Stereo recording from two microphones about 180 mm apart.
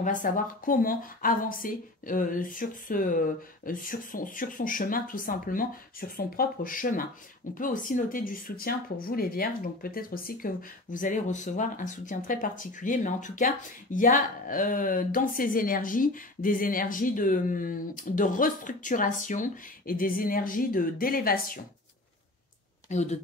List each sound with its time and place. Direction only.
0.0 s speech: 45° left (ahead or behind)
22.8 s a woman's voice: 40° left (ahead or behind)